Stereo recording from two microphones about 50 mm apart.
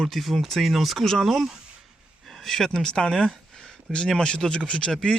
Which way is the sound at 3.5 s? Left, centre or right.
Centre.